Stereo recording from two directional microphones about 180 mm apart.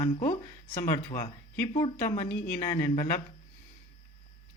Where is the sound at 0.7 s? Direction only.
50° left (ahead or behind).